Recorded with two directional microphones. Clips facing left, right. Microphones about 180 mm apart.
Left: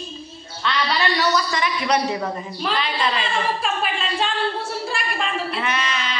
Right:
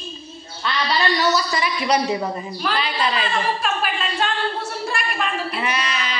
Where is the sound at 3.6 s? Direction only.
25° left (ahead or behind).